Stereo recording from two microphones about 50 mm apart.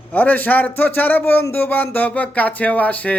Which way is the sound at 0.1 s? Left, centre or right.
Left.